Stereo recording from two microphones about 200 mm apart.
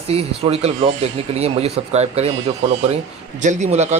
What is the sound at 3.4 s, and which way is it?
Speech, 35° right (ahead or behind).